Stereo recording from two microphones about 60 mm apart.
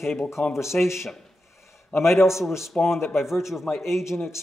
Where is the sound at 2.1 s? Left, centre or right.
Left.